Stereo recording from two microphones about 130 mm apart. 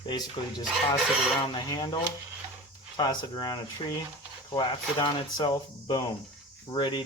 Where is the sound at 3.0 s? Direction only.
30° left (ahead or behind).